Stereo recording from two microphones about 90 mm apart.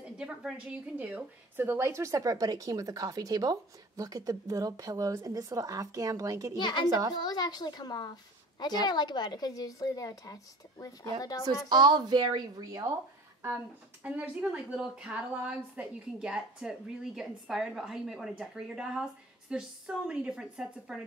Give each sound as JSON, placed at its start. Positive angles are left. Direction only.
{"t": 0.0, "sound": "a sound", "side_deg": -10}
{"t": 0.9, "sound": "a woman's voice", "side_deg": -20}
{"t": 6.6, "sound": "a child's voice", "side_deg": 55}
{"t": 11.7, "sound": "a woman's voice", "side_deg": -50}
{"t": 14.0, "sound": "a woman's voice", "side_deg": -15}